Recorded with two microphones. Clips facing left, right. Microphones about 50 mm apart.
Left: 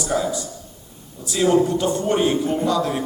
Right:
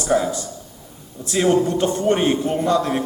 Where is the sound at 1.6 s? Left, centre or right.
Right.